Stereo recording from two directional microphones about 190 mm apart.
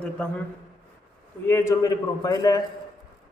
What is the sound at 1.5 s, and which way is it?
A man's voice, 15° left (ahead or behind).